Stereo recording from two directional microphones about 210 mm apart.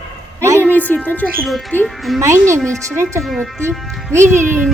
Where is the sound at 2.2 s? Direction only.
15° right (ahead or behind).